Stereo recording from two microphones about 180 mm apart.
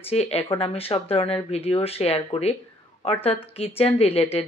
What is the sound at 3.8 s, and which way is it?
Speech, 30° left (ahead or behind).